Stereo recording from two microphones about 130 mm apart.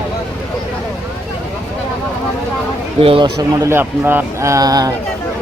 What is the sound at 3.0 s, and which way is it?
Speech, 45° right (ahead or behind).